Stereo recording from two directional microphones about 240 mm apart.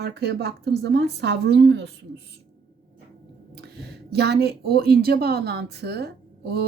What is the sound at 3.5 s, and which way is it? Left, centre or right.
Speech, right.